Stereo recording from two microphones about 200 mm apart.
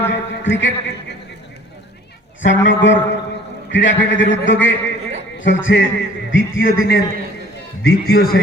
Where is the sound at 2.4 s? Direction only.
70° left (ahead or behind).